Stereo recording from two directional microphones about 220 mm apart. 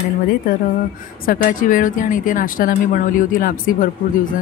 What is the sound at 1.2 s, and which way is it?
A woman's voice, 40° left (ahead or behind).